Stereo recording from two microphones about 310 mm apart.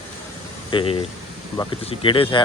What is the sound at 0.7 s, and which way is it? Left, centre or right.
Speech, centre.